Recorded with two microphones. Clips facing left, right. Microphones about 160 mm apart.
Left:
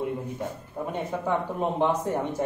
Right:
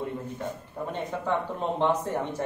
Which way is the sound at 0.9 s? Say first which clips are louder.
Left 1 dB; 10° left (ahead or behind).